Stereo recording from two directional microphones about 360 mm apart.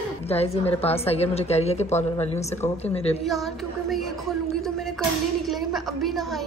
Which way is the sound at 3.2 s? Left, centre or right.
Centre.